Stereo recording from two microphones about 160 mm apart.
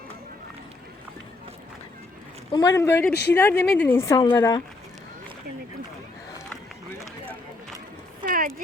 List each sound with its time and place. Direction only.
2.5 s a woman's voice: 20° left (ahead or behind)
3.1 s speech: 90° left
3.3 s a woman's voice: 15° left (ahead or behind)
8.2 s a sound: 60° right (ahead or behind)